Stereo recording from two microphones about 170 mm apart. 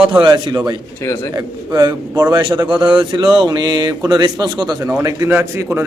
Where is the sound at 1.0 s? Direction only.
15° left (ahead or behind).